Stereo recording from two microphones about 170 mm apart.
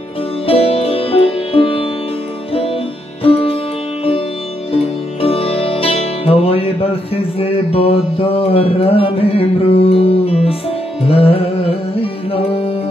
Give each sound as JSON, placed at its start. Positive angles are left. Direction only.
{"t": 0.5, "sound": "music", "side_deg": 35}
{"t": 4.7, "sound": "music", "side_deg": 35}